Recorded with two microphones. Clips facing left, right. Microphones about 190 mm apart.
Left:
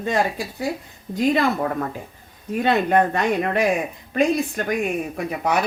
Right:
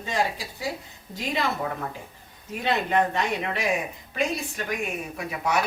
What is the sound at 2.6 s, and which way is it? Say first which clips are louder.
Speech: left 5 dB; 55° left (ahead or behind).